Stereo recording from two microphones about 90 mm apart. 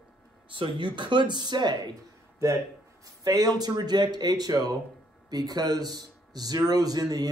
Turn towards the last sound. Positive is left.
turn(degrees=-45)  # may be behind; listen again after turning